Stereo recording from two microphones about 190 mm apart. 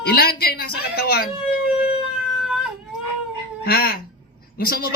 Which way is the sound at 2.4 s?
5° right (ahead or behind).